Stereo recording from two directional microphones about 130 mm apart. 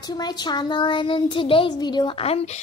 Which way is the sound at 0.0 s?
30° left (ahead or behind).